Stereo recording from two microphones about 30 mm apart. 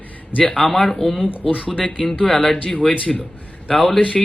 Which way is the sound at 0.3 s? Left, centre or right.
Left.